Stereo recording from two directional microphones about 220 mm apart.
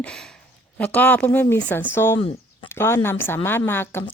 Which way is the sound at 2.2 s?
25° left (ahead or behind).